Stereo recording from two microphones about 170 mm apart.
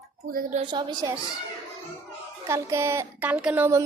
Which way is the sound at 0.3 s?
60° right (ahead or behind).